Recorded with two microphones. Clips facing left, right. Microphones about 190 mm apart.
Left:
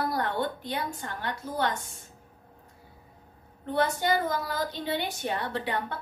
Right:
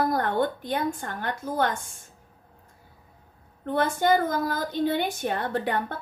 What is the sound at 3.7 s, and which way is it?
A woman's voice, 50° right (ahead or behind).